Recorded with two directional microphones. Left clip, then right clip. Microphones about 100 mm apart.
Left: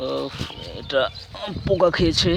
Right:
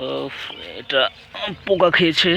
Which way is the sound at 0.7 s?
15° left (ahead or behind).